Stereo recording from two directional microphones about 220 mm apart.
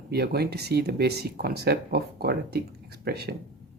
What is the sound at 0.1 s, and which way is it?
Speech, 45° right (ahead or behind).